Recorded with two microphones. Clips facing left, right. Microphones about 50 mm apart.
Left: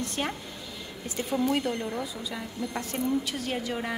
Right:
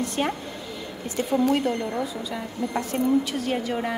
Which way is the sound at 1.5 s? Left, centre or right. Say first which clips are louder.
Right 5 dB; centre.